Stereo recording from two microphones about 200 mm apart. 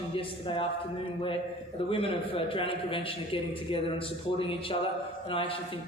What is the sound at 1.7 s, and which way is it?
A man's voice, 30° left (ahead or behind).